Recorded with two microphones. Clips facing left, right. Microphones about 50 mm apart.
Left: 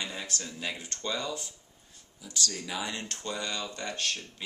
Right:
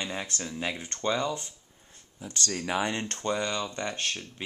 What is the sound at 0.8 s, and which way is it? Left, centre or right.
Speech, right.